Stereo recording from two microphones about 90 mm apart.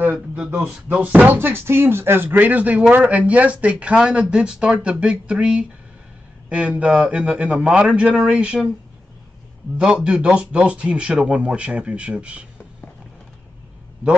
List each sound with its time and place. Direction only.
0.0 s a sound: 20° right (ahead or behind)
0.5 s speech: 20° right (ahead or behind)
9.8 s speech: 10° right (ahead or behind)